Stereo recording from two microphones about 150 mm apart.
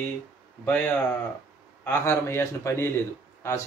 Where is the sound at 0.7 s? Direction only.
15° left (ahead or behind).